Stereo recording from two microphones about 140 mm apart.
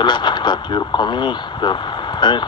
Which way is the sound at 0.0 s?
35° left (ahead or behind).